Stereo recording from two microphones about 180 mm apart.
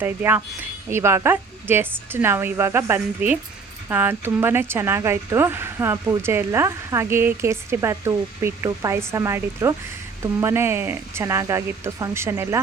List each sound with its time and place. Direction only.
0.0 s speech: 10° right (ahead or behind)